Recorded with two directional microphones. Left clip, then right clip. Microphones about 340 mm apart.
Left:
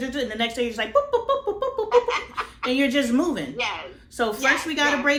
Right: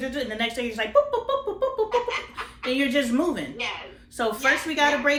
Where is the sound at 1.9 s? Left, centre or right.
Left.